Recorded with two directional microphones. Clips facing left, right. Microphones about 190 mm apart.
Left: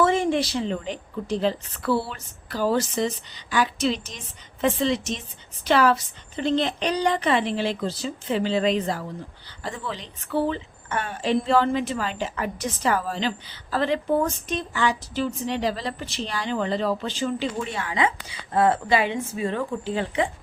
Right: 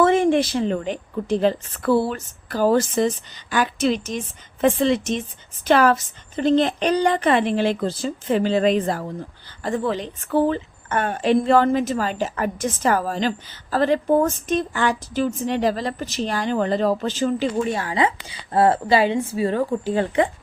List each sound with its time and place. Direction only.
0.0 s a woman's voice: 55° right (ahead or behind)